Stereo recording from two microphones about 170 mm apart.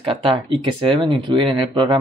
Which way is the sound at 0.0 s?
30° right (ahead or behind).